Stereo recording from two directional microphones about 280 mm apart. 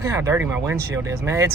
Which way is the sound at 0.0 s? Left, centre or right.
Centre.